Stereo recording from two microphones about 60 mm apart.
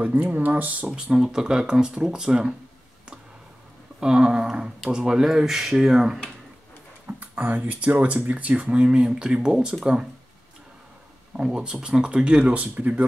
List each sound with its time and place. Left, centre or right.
0.0 s speech: right
1.1 s speech: centre
4.0 s speech: centre
7.1 s speech: right
11.3 s speech: centre